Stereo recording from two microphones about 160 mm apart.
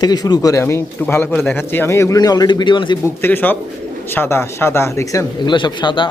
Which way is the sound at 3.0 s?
15° left (ahead or behind).